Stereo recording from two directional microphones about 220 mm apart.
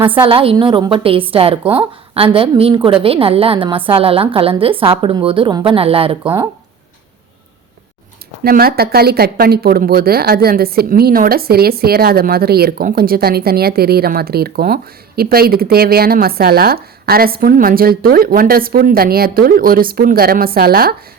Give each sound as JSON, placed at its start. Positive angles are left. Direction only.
{"t": 0.3, "sound": "a woman's voice", "side_deg": -25}
{"t": 8.4, "sound": "speech", "side_deg": -45}